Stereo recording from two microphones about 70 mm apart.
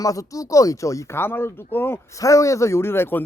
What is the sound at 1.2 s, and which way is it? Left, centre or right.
Speech, left.